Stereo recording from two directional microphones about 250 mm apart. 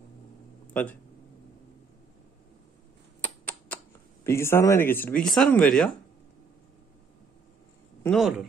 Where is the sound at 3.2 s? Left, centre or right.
Centre.